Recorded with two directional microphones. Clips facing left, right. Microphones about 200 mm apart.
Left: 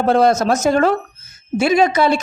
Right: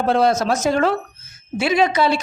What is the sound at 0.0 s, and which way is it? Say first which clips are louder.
A woman's voice: left 3 dB; 45° left (ahead or behind).